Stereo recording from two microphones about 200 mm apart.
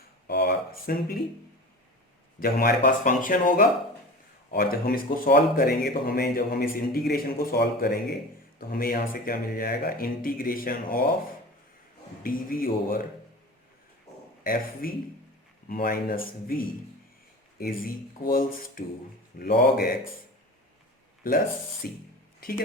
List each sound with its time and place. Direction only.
0.3 s speech: 55° left (ahead or behind)
2.4 s speech: 45° left (ahead or behind)
12.2 s speech: 45° left (ahead or behind)
14.4 s speech: 45° left (ahead or behind)
17.6 s speech: 45° left (ahead or behind)
21.2 s speech: 45° left (ahead or behind)